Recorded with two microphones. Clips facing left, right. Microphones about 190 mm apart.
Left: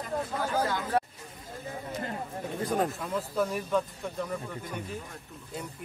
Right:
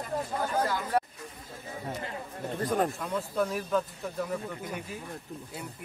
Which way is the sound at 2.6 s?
Centre (ahead or behind).